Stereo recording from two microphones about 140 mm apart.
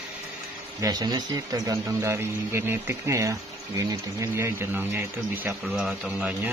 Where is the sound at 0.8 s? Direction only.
30° right (ahead or behind).